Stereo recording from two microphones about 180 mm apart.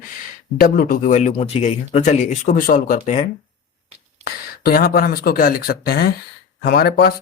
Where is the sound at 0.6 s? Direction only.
50° left (ahead or behind).